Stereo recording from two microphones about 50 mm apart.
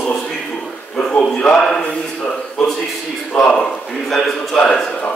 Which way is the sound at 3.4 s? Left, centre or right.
Centre.